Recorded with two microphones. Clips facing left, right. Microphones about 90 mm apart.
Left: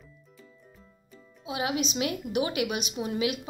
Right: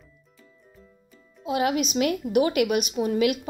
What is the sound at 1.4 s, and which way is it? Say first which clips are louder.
Speech: right 6 dB; 50° right (ahead or behind).